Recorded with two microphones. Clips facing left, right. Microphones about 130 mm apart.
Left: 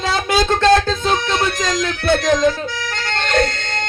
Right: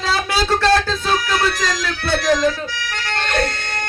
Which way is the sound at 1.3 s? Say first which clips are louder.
Left 1 dB; 20° left (ahead or behind).